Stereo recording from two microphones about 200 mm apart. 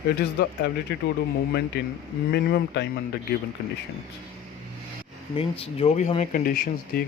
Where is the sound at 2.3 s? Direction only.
50° left (ahead or behind).